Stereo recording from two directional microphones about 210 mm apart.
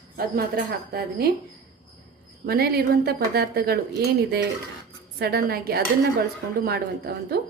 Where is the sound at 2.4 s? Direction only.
45° right (ahead or behind).